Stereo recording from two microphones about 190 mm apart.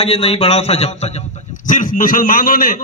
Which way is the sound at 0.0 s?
30° left (ahead or behind).